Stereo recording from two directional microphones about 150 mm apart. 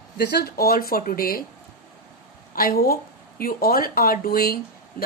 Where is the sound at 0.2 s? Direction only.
90° left.